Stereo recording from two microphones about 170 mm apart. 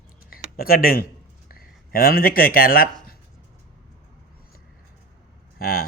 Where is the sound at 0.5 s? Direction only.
60° left (ahead or behind).